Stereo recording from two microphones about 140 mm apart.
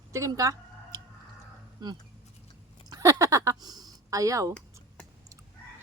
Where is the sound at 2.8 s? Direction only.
25° right (ahead or behind).